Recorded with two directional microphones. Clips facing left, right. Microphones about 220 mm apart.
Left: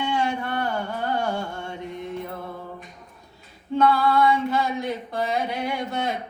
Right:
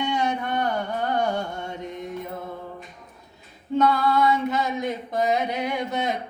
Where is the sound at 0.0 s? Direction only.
20° right (ahead or behind).